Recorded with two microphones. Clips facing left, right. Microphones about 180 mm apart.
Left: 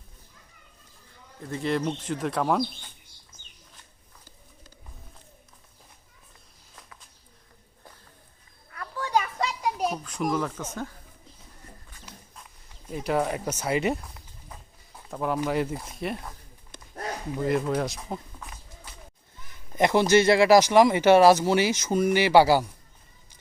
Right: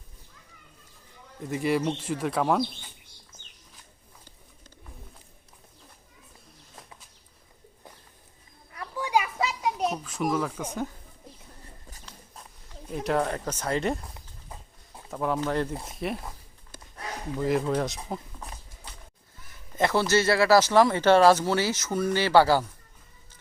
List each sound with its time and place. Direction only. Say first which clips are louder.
1.5 s speech: right 1 dB; 10° right (ahead or behind)
8.7 s children playing: even; 15° right (ahead or behind)
10.6 s speech: right 2 dB; 15° right (ahead or behind)
12.9 s speech: even; centre (ahead or behind)
15.1 s speech: left 1 dB; centre (ahead or behind)
17.3 s speech: even; 5° left (ahead or behind)
19.7 s speech: left 4 dB; 15° left (ahead or behind)